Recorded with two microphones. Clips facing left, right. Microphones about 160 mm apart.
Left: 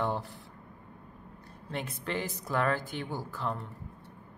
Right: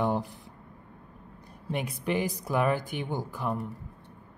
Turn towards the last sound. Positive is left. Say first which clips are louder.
# right 3 dB
turn(degrees=-15)  # may be behind; listen again after turning